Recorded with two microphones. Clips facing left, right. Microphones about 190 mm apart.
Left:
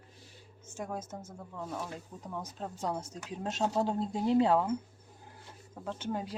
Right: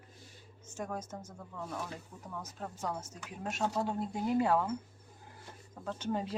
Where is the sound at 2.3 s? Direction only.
20° left (ahead or behind).